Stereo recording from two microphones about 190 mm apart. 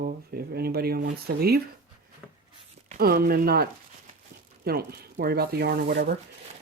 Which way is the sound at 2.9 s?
50° right (ahead or behind).